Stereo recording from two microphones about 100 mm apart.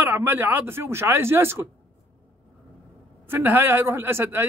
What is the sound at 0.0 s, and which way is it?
Speech, 20° right (ahead or behind).